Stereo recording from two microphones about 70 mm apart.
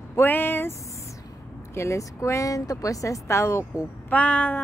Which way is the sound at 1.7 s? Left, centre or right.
Left.